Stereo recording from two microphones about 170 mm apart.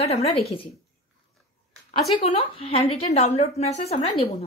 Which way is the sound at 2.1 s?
35° left (ahead or behind).